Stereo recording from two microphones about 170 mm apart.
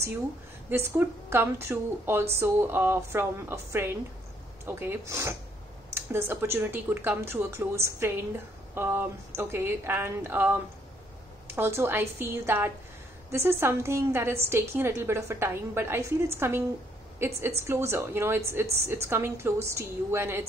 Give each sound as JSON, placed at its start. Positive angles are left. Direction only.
{"t": 0.7, "sound": "a woman's voice", "side_deg": -15}